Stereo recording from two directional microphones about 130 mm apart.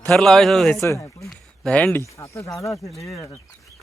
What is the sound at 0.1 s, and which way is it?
Speech, 5° left (ahead or behind).